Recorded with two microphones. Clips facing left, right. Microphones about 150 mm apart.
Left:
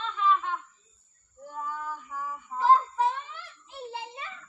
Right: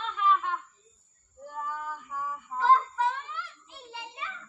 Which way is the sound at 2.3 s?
15° left (ahead or behind).